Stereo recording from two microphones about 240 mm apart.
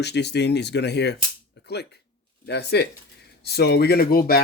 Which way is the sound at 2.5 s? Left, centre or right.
Left.